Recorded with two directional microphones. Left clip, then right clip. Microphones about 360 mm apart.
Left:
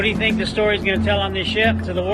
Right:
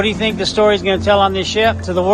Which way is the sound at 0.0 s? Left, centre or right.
Centre.